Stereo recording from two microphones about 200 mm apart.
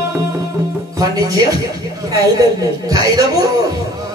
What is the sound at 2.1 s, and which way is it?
A woman's voice, 15° right (ahead or behind).